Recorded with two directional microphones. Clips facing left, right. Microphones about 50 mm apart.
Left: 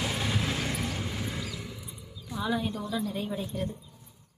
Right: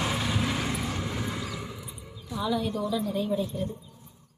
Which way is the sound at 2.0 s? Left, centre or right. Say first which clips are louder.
Right 2 dB; right.